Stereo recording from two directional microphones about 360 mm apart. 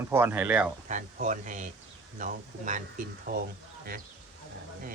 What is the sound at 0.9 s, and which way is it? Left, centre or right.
Speech, right.